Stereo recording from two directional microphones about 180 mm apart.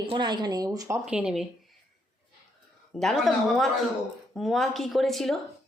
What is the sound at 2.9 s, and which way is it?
Speech, centre (ahead or behind).